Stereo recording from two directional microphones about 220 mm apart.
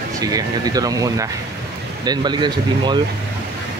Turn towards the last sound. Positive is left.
turn(degrees=-20)  # may be behind; listen again after turning